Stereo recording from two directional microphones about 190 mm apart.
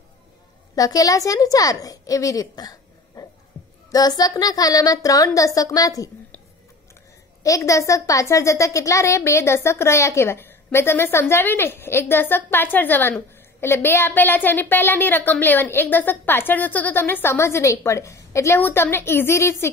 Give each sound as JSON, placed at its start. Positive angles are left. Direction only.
{"t": 0.7, "sound": "a woman's voice", "side_deg": 20}
{"t": 7.4, "sound": "speech", "side_deg": 15}